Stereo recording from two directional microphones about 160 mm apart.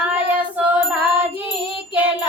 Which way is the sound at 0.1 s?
10° right (ahead or behind).